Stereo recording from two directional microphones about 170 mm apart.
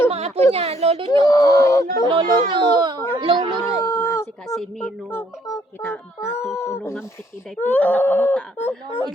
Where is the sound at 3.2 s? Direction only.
30° right (ahead or behind).